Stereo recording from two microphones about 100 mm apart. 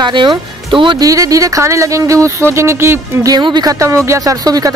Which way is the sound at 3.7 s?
30° right (ahead or behind).